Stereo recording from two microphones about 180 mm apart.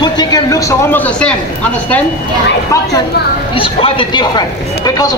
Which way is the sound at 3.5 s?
30° left (ahead or behind).